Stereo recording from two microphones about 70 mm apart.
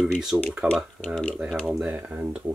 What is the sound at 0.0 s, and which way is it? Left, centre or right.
Speech, centre.